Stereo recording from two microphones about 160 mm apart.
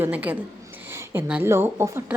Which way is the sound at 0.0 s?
10° right (ahead or behind).